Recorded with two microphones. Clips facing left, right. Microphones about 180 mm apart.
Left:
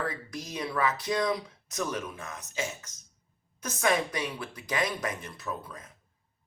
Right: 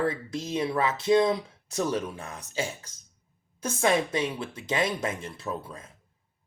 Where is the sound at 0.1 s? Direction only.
25° right (ahead or behind).